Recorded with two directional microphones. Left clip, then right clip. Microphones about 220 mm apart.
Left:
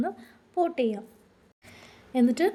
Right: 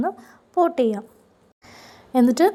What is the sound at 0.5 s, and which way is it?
Speech, 15° right (ahead or behind).